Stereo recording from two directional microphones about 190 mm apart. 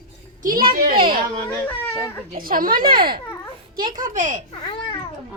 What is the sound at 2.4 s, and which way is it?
Speech, 50° right (ahead or behind).